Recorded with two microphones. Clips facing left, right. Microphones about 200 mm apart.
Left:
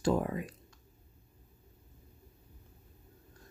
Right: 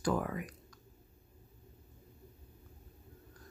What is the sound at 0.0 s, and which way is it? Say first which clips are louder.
Speech: left 3 dB; 25° left (ahead or behind).